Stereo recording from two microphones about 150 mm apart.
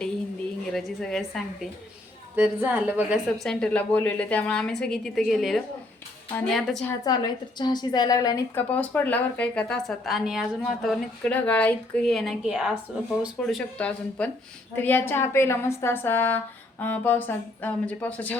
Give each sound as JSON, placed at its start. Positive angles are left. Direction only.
{"t": 0.7, "sound": "a woman's voice", "side_deg": 5}
{"t": 2.3, "sound": "a woman's voice", "side_deg": -10}
{"t": 3.4, "sound": "a woman's voice", "side_deg": 5}
{"t": 7.0, "sound": "a woman's voice", "side_deg": 25}
{"t": 8.5, "sound": "speech", "side_deg": 10}
{"t": 10.8, "sound": "a woman's voice", "side_deg": 10}